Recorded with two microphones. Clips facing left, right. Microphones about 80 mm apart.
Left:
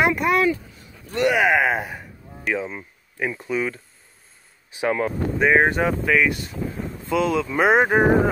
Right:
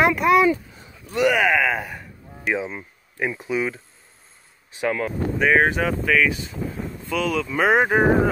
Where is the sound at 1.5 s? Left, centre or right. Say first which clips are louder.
Left 1 dB; left.